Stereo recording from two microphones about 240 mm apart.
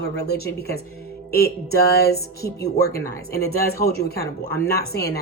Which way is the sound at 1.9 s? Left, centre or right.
Left.